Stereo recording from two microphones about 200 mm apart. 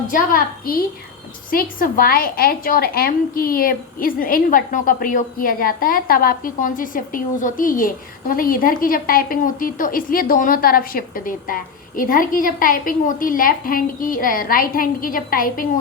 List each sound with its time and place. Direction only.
0.1 s a woman's voice: 45° left (ahead or behind)